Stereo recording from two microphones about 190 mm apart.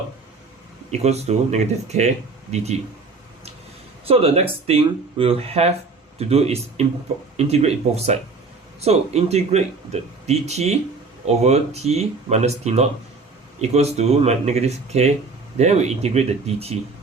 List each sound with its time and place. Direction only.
0.9 s speech: 35° right (ahead or behind)
4.0 s speech: 30° right (ahead or behind)